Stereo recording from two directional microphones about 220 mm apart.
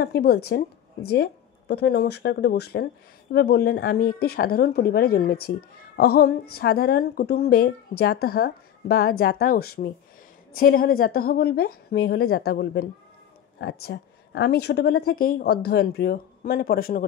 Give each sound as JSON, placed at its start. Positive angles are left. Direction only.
{"t": 0.0, "sound": "speech", "side_deg": 45}